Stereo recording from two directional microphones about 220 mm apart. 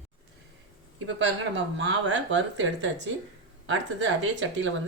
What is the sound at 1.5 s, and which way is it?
Speech, 55° right (ahead or behind).